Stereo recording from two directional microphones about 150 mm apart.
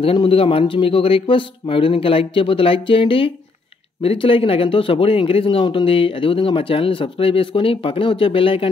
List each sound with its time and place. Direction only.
0.0 s speech: 35° left (ahead or behind)